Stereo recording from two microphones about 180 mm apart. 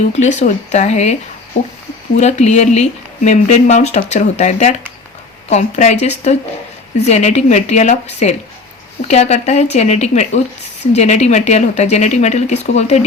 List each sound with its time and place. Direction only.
0.1 s speech: 40° left (ahead or behind)
2.1 s speech: 40° left (ahead or behind)